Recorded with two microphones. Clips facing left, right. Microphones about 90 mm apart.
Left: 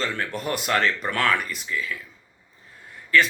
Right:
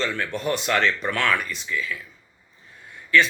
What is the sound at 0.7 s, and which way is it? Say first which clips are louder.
Speech: even; 35° left (ahead or behind).